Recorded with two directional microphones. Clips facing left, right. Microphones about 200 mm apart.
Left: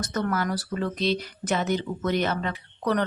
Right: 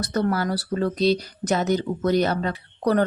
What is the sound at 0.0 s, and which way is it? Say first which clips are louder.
Speech: right 4 dB; 35° right (ahead or behind).